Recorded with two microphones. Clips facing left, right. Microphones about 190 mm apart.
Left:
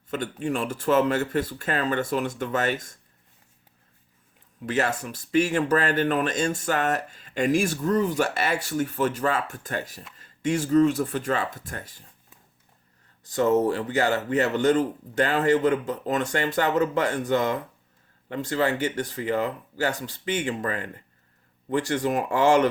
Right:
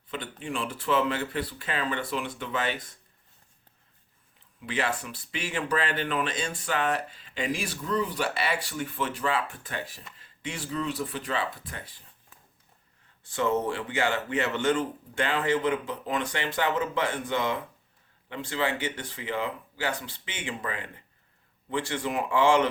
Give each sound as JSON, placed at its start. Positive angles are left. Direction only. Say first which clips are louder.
{"t": 0.1, "sound": "speech", "louder": "left 7 dB", "side_deg": 45}
{"t": 4.6, "sound": "speech", "louder": "left 5 dB", "side_deg": 45}
{"t": 13.2, "sound": "speech", "louder": "left 6 dB", "side_deg": 40}